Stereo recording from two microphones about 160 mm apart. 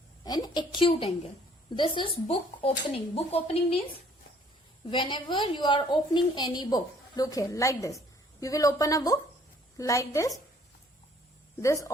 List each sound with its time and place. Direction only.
0.3 s a woman's voice: 25° left (ahead or behind)
4.9 s a woman's voice: 30° left (ahead or behind)
11.6 s a woman's voice: 20° left (ahead or behind)